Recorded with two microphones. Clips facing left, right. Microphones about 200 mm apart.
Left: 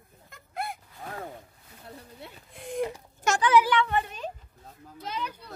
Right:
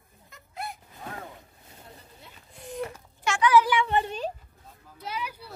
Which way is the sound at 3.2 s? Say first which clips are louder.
Even; 40° left (ahead or behind).